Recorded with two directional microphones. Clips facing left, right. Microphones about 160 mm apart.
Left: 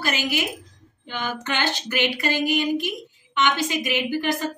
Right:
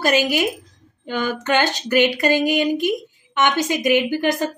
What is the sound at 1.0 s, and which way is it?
A woman's voice, 45° right (ahead or behind).